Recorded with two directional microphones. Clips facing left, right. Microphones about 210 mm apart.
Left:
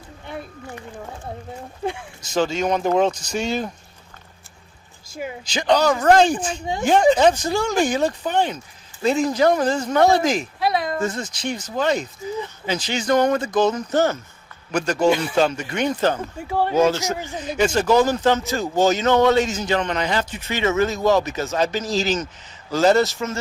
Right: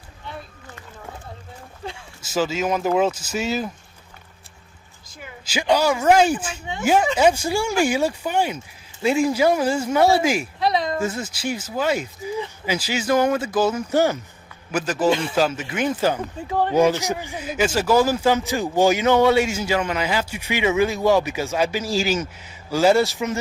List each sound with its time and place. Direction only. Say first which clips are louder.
2.2 s speech: left 1 dB; 5° right (ahead or behind)
5.5 s speech: left 1 dB; 10° right (ahead or behind)